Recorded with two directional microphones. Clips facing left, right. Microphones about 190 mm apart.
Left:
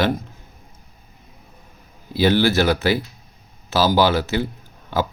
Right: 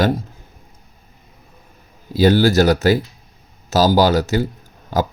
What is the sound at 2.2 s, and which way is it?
A man's voice, 45° right (ahead or behind).